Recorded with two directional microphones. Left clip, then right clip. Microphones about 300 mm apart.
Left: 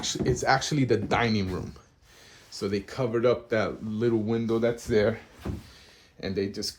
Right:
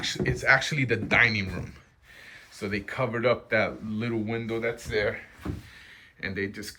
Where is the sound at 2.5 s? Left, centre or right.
Centre.